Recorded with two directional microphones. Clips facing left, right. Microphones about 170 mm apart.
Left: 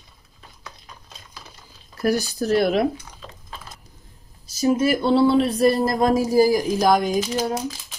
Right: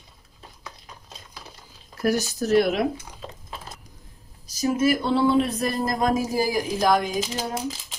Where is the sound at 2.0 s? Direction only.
35° left (ahead or behind).